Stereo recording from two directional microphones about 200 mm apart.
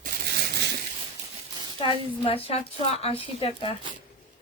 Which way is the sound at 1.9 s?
25° left (ahead or behind).